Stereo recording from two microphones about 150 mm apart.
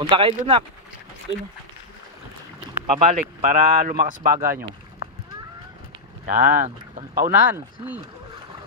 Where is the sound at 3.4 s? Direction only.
65° right (ahead or behind).